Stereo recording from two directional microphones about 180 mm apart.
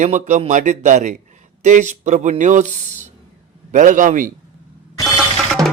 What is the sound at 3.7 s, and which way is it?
Speech, 45° right (ahead or behind).